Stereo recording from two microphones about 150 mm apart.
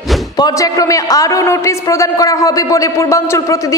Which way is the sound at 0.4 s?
25° left (ahead or behind).